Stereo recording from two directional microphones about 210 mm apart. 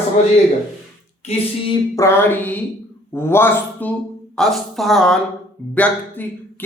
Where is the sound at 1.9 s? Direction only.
10° left (ahead or behind).